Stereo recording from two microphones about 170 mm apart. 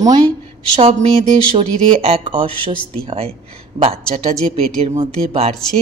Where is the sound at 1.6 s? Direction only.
35° right (ahead or behind).